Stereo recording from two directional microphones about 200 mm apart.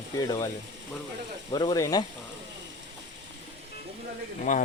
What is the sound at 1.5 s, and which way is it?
Speech, 20° left (ahead or behind).